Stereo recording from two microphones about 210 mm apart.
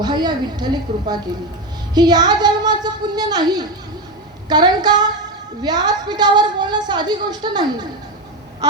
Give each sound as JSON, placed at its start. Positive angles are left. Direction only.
{"t": 0.0, "sound": "a woman's voice", "side_deg": -20}